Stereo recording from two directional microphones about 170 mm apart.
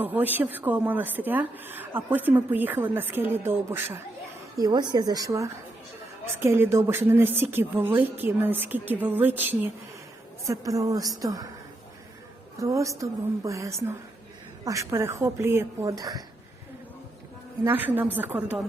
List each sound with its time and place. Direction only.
0.0 s a woman's voice: 10° right (ahead or behind)
12.5 s speech: 20° right (ahead or behind)
17.6 s speech: 10° right (ahead or behind)